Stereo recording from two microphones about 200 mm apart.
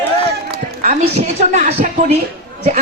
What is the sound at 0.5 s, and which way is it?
A woman's voice, 40° right (ahead or behind).